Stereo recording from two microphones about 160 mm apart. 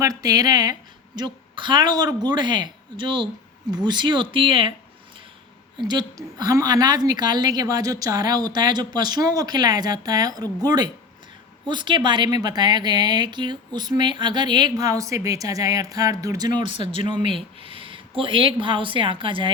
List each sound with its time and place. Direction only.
0.0 s a woman's voice: 20° right (ahead or behind)
5.9 s a woman's voice: 25° right (ahead or behind)
16.6 s speech: 30° right (ahead or behind)